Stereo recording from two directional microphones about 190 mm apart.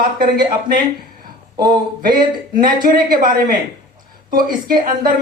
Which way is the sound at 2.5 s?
45° right (ahead or behind).